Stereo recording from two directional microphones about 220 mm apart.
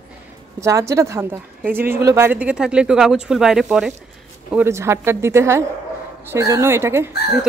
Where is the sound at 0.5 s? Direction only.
15° right (ahead or behind).